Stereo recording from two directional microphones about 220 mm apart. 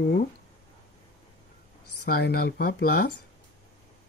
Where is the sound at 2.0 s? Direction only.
45° left (ahead or behind).